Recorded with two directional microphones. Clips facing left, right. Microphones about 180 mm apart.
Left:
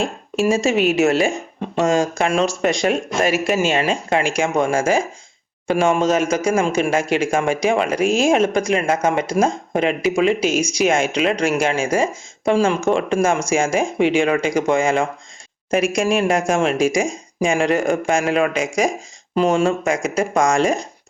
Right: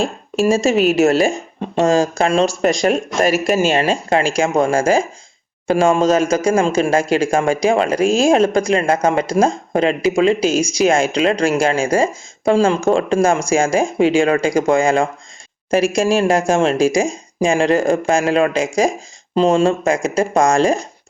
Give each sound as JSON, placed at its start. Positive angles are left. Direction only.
{"t": 0.0, "sound": "speech", "side_deg": -40}